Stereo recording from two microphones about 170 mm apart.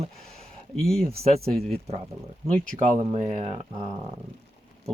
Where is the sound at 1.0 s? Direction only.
35° right (ahead or behind).